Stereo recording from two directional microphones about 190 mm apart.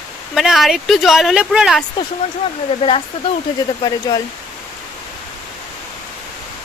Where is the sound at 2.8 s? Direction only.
30° left (ahead or behind).